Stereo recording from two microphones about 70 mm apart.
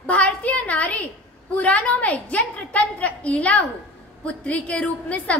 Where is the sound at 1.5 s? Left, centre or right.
Left.